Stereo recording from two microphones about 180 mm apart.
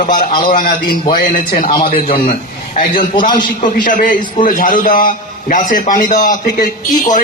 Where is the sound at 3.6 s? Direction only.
50° left (ahead or behind).